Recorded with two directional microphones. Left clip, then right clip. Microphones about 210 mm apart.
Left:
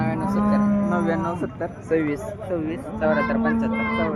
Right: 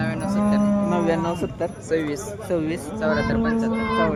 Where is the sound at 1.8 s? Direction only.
5° left (ahead or behind).